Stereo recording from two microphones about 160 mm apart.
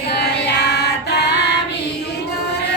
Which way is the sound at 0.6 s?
90° left.